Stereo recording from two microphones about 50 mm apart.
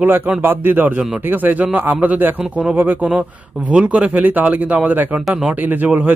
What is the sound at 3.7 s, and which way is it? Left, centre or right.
Speech, right.